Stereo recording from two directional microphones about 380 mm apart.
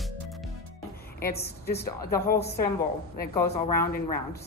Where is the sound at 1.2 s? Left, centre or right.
Left.